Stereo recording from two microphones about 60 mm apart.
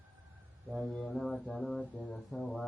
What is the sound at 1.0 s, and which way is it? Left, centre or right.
Speech, centre.